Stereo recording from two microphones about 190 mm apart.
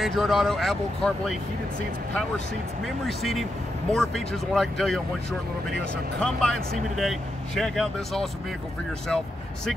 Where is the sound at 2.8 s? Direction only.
Centre (ahead or behind).